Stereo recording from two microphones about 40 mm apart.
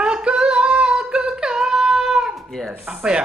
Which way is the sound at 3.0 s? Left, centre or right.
Right.